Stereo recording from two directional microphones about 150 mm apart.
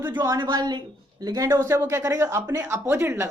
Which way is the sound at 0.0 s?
15° right (ahead or behind).